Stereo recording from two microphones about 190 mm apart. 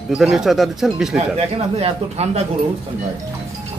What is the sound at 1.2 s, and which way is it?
Speech, 30° right (ahead or behind).